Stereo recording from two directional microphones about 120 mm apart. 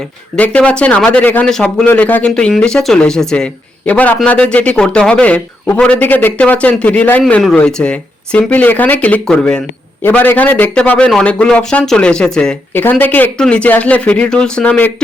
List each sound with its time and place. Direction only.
0.3 s speech: 10° left (ahead or behind)
12.7 s speech: 15° left (ahead or behind)